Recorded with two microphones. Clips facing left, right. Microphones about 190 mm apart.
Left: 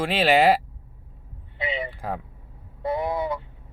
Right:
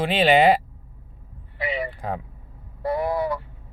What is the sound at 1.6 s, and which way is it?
Vehicle, 20° left (ahead or behind).